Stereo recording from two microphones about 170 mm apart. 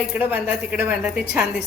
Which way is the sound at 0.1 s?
10° right (ahead or behind).